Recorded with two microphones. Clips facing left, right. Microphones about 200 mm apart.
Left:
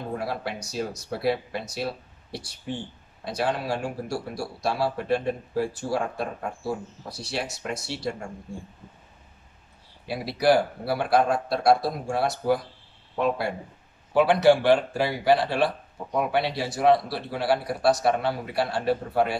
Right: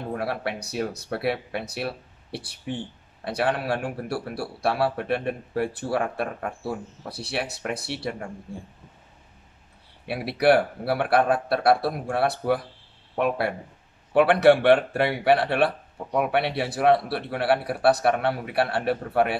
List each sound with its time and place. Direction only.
0.2 s speech: 65° right (ahead or behind)
10.0 s speech: 65° right (ahead or behind)